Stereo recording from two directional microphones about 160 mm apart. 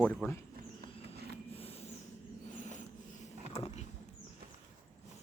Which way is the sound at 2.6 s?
50° left (ahead or behind).